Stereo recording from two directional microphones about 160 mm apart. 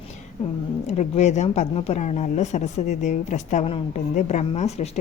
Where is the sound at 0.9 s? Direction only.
45° left (ahead or behind).